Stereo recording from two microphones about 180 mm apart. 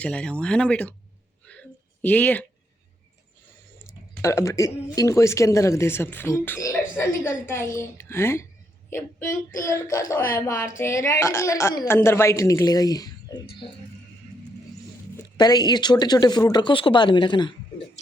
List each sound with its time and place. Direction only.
0.0 s speech: 5° left (ahead or behind)
1.5 s a sound: 10° left (ahead or behind)
4.2 s speech: 15° left (ahead or behind)
15.1 s speech: 20° left (ahead or behind)